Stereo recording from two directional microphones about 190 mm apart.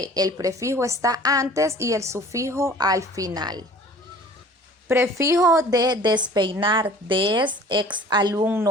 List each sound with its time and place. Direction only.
0.0 s a woman's voice: 20° right (ahead or behind)
4.9 s a woman's voice: 15° right (ahead or behind)
8.4 s a woman's voice: 10° right (ahead or behind)